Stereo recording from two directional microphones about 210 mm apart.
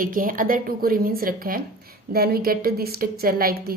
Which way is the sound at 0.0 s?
40° right (ahead or behind).